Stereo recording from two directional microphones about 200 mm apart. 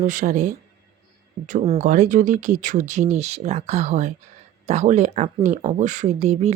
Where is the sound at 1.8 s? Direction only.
40° right (ahead or behind).